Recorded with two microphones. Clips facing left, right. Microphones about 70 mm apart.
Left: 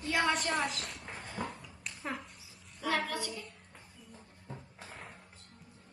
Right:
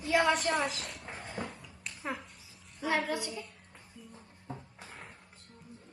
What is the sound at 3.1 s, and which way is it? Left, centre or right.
Speech, centre.